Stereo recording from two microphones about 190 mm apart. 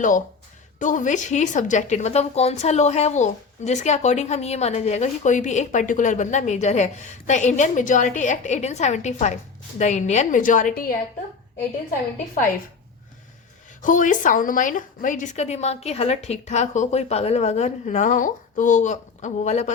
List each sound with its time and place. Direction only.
0.8 s a woman's voice: 40° left (ahead or behind)
13.8 s a woman's voice: 45° left (ahead or behind)